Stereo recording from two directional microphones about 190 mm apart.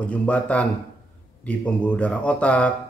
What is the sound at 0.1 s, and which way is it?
Speech, 5° left (ahead or behind).